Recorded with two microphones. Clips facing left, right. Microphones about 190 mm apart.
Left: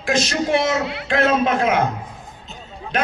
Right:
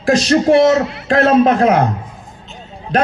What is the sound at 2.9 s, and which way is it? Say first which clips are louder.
Speech: right 6 dB; 40° right (ahead or behind).